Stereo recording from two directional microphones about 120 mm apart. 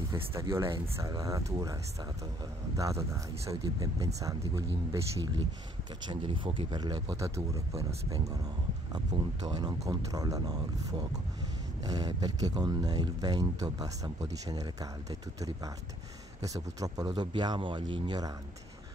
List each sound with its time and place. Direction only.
0.3 s speech: 25° right (ahead or behind)
2.8 s speech: 25° right (ahead or behind)
9.1 s speech: 50° right (ahead or behind)
9.5 s speech: 35° right (ahead or behind)